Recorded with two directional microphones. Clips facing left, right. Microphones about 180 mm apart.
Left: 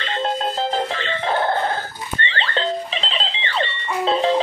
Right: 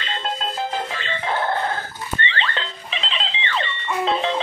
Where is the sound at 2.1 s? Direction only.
35° left (ahead or behind).